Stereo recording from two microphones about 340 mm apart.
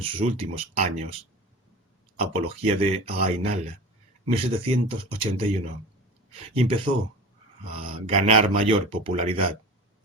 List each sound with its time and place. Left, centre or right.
0.0 s speech: centre
2.1 s speech: centre
6.5 s speech: centre
7.9 s speech: centre